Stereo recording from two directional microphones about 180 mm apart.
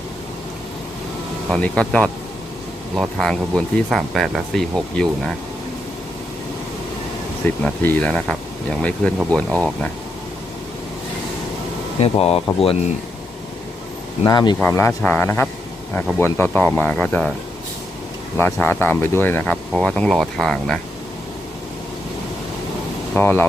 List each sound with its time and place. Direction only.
1.5 s speech: 5° left (ahead or behind)
7.6 s speech: 10° left (ahead or behind)
11.9 s speech: 35° left (ahead or behind)
14.3 s speech: 25° left (ahead or behind)
14.6 s speech: 10° left (ahead or behind)
18.3 s speech: 10° left (ahead or behind)
23.1 s speech: 10° left (ahead or behind)